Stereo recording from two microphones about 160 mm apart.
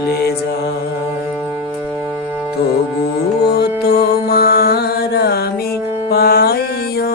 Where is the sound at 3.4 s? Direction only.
85° left.